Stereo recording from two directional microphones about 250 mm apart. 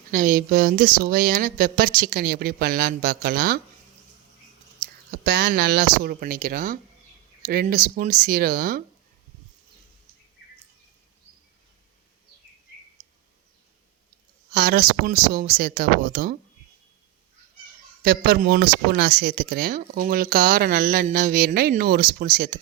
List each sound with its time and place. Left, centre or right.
0.1 s speech: right
4.8 s speech: right
14.5 s speech: right
18.0 s speech: right